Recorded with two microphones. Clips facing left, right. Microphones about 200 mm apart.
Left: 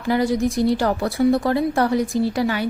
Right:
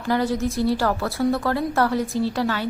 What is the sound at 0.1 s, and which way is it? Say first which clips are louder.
A woman's voice: left 3 dB; 15° left (ahead or behind).